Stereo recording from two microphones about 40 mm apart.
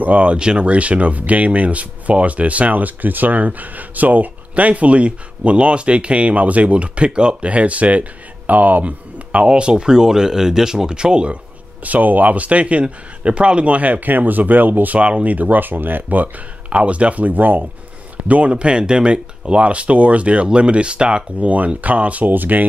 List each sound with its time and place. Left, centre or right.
0.0 s speech: right
0.4 s speech: right
11.8 s speech: right
15.0 s speech: right
16.7 s speech: right
18.5 s speech: right
21.4 s speech: right
22.2 s speech: right